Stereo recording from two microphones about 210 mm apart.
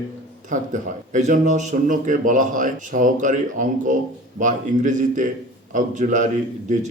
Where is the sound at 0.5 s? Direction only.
35° right (ahead or behind).